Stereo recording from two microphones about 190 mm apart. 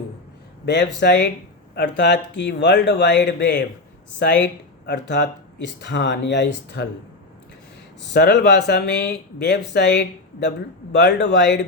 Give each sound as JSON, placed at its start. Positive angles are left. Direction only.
{"t": 0.6, "sound": "speech", "side_deg": 65}
{"t": 8.1, "sound": "speech", "side_deg": 65}